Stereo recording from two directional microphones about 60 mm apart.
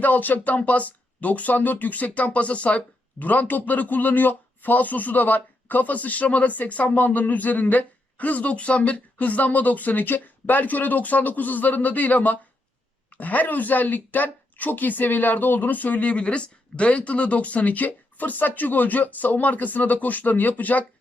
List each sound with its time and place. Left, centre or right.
0.0 s speech: left